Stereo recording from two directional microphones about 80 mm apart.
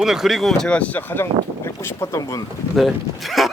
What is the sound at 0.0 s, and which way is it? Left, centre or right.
Speech, centre.